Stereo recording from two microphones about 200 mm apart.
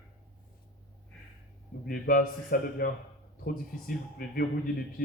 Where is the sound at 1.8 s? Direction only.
45° left (ahead or behind).